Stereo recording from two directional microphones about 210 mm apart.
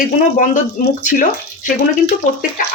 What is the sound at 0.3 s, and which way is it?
Speech, 40° left (ahead or behind).